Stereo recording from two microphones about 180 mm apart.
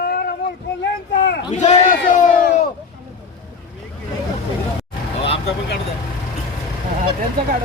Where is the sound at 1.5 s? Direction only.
40° left (ahead or behind).